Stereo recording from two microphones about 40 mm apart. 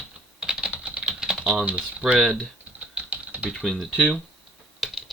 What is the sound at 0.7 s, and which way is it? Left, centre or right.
Typing, right.